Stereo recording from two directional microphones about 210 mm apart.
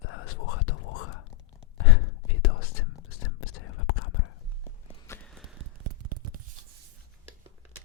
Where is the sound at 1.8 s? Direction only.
80° left.